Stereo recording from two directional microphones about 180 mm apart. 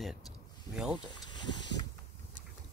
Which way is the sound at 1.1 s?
25° left (ahead or behind).